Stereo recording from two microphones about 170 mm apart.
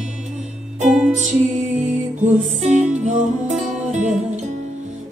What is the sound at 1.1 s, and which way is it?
Music, 45° right (ahead or behind).